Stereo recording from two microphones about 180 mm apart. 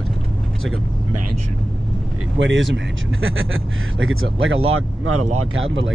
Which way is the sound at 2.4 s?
90° right.